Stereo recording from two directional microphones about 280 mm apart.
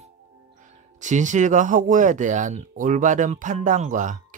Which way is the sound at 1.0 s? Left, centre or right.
Right.